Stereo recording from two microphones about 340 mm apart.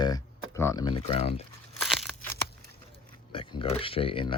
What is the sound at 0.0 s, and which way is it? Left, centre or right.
Speech, centre.